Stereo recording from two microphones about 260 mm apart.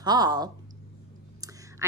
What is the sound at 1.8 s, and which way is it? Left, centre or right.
Speech, centre.